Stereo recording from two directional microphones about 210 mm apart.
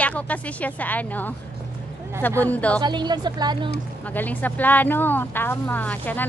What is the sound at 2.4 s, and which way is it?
Speech, 5° left (ahead or behind).